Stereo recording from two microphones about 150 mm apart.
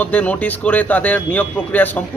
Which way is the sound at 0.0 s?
10° left (ahead or behind).